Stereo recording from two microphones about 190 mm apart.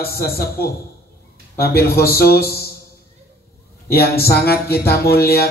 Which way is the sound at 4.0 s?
55° left (ahead or behind).